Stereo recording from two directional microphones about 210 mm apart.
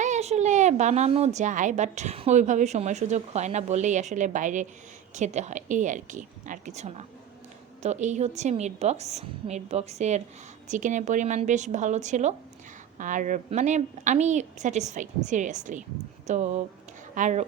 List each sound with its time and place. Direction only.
0.0 s a woman's voice: 35° right (ahead or behind)